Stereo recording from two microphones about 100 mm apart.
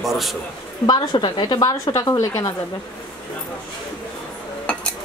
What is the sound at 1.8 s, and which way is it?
Speech, 35° left (ahead or behind).